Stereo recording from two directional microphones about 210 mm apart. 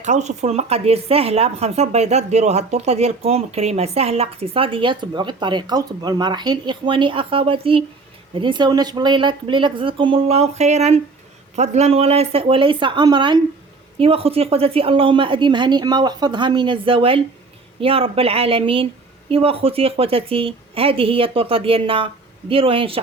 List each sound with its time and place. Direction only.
0.0 s speech: 35° right (ahead or behind)